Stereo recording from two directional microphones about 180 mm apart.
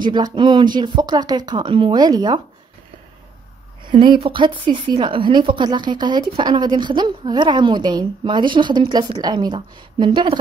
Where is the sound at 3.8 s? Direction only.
25° right (ahead or behind).